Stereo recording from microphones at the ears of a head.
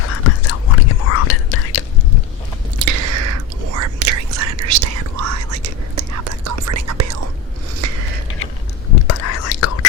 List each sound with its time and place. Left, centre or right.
0.0 s whispering: left
2.7 s whispering: right
7.8 s biting: right
8.9 s whispering: left